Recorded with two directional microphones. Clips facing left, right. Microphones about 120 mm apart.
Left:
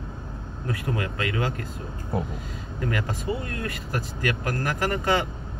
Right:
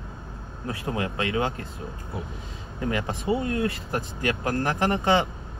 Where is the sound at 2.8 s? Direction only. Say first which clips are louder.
Right 1 dB; 25° right (ahead or behind).